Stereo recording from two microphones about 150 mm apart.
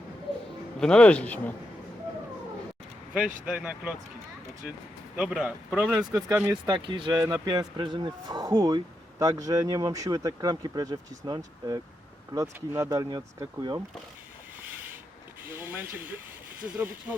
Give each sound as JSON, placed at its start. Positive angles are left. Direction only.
{"t": 0.8, "sound": "a man's voice", "side_deg": 5}
{"t": 3.4, "sound": "speech", "side_deg": -10}
{"t": 5.1, "sound": "a man's voice", "side_deg": -5}
{"t": 6.7, "sound": "speech", "side_deg": -35}
{"t": 7.2, "sound": "speech", "side_deg": -20}
{"t": 15.4, "sound": "a sound", "side_deg": -15}
{"t": 16.7, "sound": "speech", "side_deg": -10}